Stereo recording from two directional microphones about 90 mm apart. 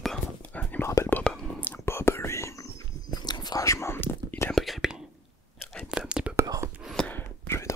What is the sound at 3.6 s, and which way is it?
Whispering, 30° left (ahead or behind).